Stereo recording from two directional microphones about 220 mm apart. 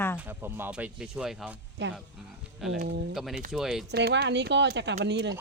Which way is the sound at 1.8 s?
50° right (ahead or behind).